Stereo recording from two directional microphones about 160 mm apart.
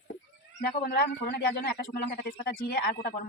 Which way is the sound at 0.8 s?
75° left (ahead or behind).